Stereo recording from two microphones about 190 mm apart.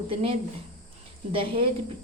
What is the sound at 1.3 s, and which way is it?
Speech, 30° right (ahead or behind).